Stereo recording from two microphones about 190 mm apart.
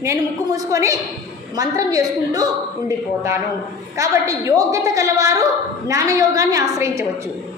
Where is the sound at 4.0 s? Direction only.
15° right (ahead or behind).